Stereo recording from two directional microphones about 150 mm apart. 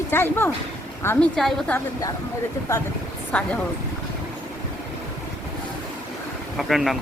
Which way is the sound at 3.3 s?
5° left (ahead or behind).